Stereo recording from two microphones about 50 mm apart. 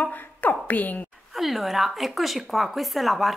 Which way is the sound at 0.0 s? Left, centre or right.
Left.